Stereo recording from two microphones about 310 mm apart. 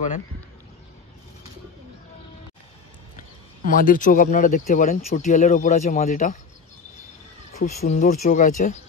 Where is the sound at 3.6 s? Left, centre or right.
Left.